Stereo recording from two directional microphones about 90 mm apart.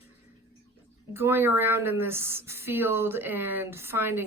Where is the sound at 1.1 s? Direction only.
25° right (ahead or behind).